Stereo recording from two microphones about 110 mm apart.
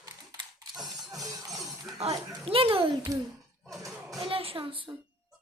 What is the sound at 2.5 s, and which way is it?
Speech, 55° right (ahead or behind).